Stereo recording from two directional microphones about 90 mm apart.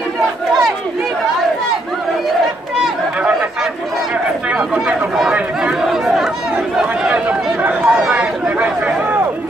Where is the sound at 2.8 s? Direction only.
15° right (ahead or behind).